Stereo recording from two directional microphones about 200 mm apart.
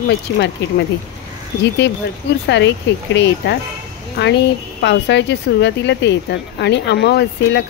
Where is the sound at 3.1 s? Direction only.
60° left (ahead or behind).